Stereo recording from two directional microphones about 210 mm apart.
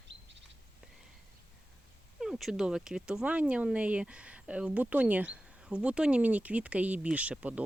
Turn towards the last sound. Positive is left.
turn(degrees=-5)  # may be behind; listen again after turning